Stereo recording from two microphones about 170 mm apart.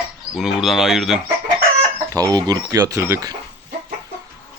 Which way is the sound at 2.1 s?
20° right (ahead or behind).